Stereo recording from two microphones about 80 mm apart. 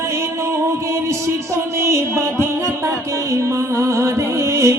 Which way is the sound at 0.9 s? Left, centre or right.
Right.